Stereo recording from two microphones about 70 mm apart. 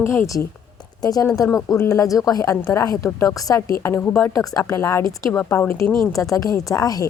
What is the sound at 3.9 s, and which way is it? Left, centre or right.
Speech, left.